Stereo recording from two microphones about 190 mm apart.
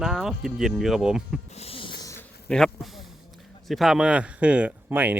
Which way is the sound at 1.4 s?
35° left (ahead or behind).